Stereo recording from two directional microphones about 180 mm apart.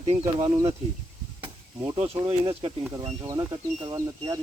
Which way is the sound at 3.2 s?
20° right (ahead or behind).